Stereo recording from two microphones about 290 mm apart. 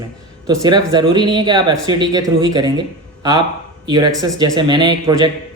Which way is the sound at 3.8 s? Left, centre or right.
Centre.